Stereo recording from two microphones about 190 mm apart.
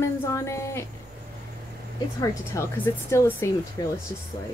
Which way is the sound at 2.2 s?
15° left (ahead or behind).